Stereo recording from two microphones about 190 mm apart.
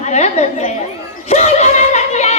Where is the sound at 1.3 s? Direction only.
35° left (ahead or behind).